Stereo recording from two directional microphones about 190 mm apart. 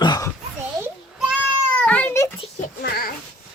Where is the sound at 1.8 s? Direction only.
10° left (ahead or behind).